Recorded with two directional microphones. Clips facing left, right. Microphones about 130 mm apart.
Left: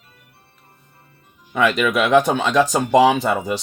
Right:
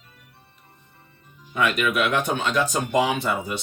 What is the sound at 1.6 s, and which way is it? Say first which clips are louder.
Speech: left 4 dB; 90° left.